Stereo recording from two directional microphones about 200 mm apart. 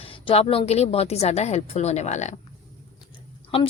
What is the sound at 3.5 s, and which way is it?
Speech, 30° left (ahead or behind).